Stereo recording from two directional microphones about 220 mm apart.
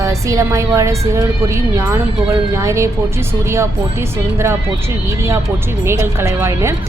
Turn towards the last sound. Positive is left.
turn(degrees=-10)  # may be behind; listen again after turning